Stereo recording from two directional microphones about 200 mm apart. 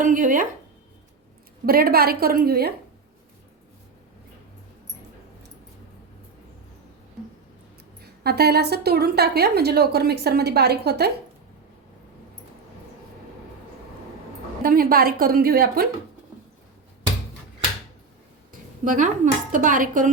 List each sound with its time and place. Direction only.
0.0 s a woman's voice: 40° right (ahead or behind)
1.6 s a woman's voice: 50° right (ahead or behind)
8.0 s a woman's voice: 55° right (ahead or behind)
14.6 s a woman's voice: 45° right (ahead or behind)
18.9 s a woman's voice: 40° right (ahead or behind)